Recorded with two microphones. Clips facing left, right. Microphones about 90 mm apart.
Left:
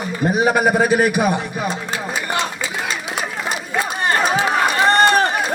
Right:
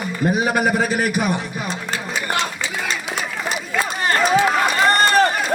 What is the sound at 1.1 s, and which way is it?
Speech, 15° left (ahead or behind).